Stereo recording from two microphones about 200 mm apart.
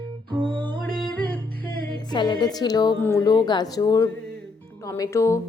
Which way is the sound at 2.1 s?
20° left (ahead or behind).